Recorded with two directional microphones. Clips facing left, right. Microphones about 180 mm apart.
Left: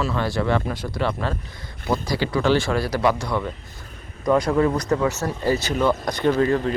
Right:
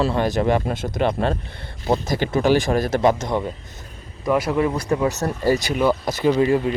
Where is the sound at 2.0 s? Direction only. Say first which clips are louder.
Right 1 dB; 50° right (ahead or behind).